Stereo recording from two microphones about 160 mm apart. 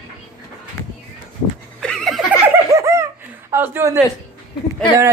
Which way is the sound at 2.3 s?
20° right (ahead or behind).